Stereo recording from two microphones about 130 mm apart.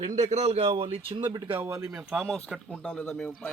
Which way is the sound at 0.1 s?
60° right (ahead or behind).